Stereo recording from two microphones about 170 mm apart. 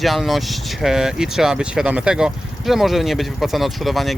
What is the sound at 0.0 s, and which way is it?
Speech, centre (ahead or behind).